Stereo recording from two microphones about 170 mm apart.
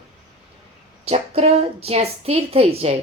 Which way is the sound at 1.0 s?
40° right (ahead or behind).